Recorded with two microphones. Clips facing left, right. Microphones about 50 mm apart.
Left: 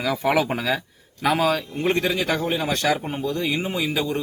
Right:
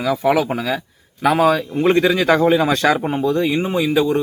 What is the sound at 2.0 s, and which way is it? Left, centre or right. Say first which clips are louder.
A man's voice: right 9 dB; right.